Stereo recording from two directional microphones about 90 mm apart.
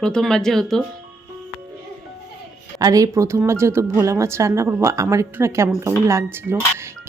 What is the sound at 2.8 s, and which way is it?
Speech, 40° right (ahead or behind).